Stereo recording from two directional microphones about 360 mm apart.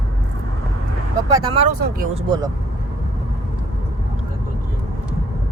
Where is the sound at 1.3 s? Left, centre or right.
Centre.